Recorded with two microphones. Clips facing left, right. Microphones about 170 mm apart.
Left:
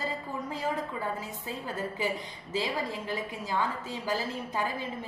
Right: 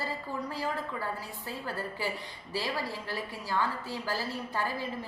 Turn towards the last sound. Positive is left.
turn(degrees=20)  # may be behind; listen again after turning